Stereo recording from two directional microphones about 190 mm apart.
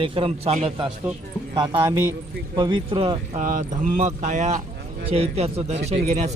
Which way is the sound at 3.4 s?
45° right (ahead or behind).